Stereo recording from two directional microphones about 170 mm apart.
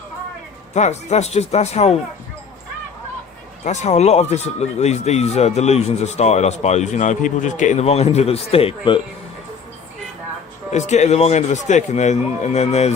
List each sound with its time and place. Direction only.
0.7 s speech: 40° left (ahead or behind)
3.6 s speech: 45° left (ahead or behind)
10.7 s speech: 45° left (ahead or behind)